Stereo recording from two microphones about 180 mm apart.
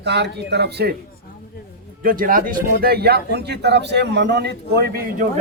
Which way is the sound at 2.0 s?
50° right (ahead or behind).